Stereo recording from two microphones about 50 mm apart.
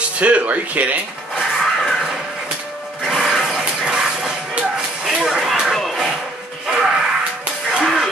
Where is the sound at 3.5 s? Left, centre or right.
Centre.